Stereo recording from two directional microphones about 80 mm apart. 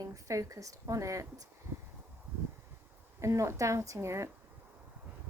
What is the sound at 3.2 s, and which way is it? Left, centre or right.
A woman's voice, right.